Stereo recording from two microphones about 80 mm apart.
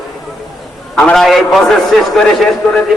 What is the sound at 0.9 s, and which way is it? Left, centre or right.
A man's voice, centre.